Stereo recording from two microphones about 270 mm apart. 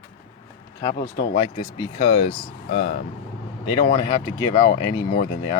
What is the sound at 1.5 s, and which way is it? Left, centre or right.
Speech, centre.